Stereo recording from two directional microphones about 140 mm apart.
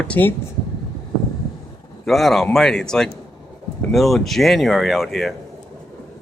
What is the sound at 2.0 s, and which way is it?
Speech, centre (ahead or behind).